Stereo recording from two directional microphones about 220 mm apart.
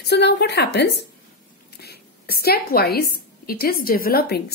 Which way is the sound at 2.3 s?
45° left (ahead or behind).